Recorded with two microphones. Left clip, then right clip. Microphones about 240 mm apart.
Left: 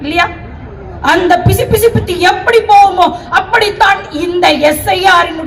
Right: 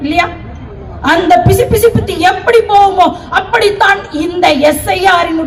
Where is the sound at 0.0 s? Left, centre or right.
Left.